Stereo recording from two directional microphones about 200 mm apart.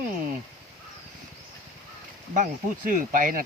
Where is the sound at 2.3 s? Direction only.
40° right (ahead or behind).